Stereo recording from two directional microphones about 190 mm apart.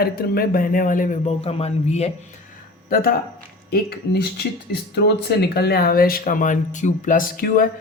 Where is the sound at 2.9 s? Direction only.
50° left (ahead or behind).